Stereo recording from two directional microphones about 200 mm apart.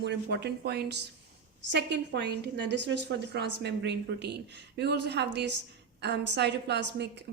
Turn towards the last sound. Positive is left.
turn(degrees=-60)  # may be behind; listen again after turning